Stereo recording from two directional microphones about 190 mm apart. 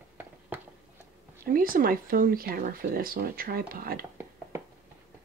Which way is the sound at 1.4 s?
50° right (ahead or behind).